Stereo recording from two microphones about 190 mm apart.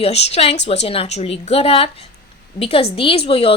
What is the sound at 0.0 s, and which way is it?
A woman's voice, 35° left (ahead or behind).